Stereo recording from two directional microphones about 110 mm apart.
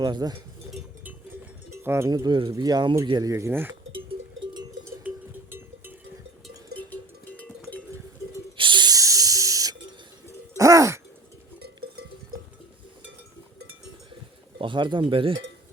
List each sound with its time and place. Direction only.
0.0 s speech: 40° right (ahead or behind)
1.7 s cowbell: 25° right (ahead or behind)
2.0 s speech: 35° right (ahead or behind); by 3.8 s 20° right (ahead or behind)
5.0 s cowbell: 20° right (ahead or behind)
6.7 s cowbell: 15° left (ahead or behind)
8.5 s a sound: 45° right (ahead or behind); by 9.7 s 30° right (ahead or behind)
10.6 s hoot: 30° right (ahead or behind)
14.6 s speech: 45° right (ahead or behind)
15.1 s cowbell: 55° right (ahead or behind)